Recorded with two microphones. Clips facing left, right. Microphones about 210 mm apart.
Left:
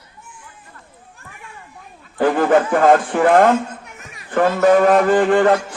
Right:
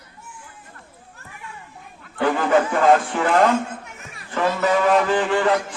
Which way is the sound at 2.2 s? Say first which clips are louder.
Left 4 dB; 50° left (ahead or behind).